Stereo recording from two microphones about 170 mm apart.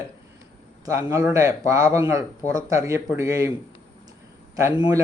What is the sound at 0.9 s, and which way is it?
A man's voice, 15° right (ahead or behind).